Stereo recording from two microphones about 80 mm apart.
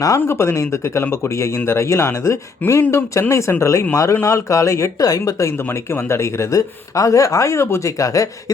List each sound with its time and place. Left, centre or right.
0.2 s speech: left